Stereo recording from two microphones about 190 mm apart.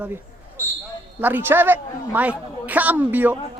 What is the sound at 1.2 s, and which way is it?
A woman's voice, 10° right (ahead or behind).